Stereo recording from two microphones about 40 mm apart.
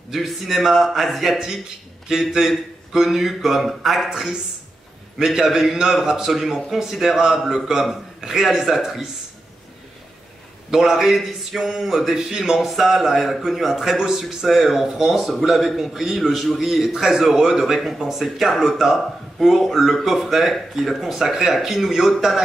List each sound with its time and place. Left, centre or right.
0.3 s a man's voice: centre
2.1 s a man's voice: centre
4.1 s speech: centre
6.3 s a man's voice: centre
10.7 s a man's voice: centre
12.5 s a man's voice: centre
13.9 s speech: centre
14.5 s a man's voice: centre